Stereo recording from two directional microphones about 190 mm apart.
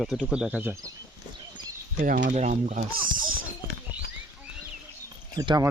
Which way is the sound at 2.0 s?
45° right (ahead or behind).